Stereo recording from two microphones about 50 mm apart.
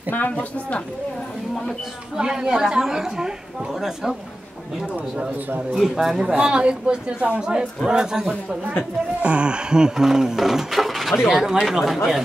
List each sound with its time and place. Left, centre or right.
0.1 s speech: left
2.1 s speech: centre
5.8 s speech: centre
9.2 s speech: right; by 12.2 s centre